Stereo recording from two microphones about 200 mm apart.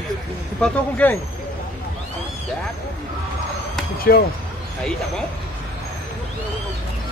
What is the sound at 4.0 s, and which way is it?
Basketball bounce, 50° left (ahead or behind).